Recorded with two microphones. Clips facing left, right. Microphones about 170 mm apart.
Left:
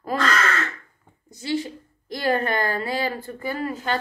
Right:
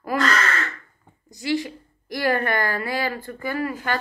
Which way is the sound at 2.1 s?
25° left (ahead or behind).